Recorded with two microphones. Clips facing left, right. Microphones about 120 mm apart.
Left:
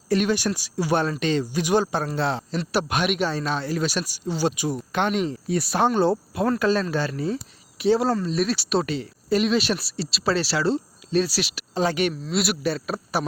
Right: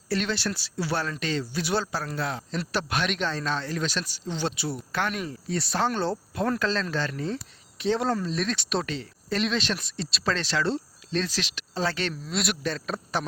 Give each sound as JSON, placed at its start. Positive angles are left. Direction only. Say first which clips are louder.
{"t": 0.1, "sound": "speech", "louder": "left 6 dB", "side_deg": 15}
{"t": 2.7, "sound": "speech", "louder": "left 5 dB", "side_deg": 15}
{"t": 5.5, "sound": "speech", "louder": "left 4 dB", "side_deg": 10}
{"t": 12.2, "sound": "speech", "louder": "left 5 dB", "side_deg": 5}